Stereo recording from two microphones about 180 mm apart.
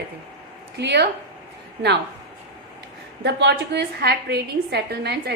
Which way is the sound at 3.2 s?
70° right (ahead or behind).